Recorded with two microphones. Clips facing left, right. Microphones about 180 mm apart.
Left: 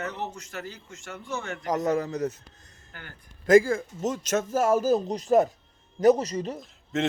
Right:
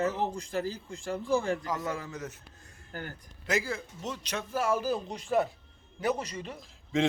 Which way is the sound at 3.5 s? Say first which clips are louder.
Left 13 dB; 50° left (ahead or behind).